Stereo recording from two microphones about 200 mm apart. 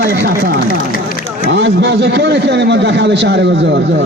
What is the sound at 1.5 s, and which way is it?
A man's voice, 60° right (ahead or behind).